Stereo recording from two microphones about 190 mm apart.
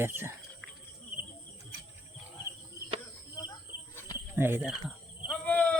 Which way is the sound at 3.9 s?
15° left (ahead or behind).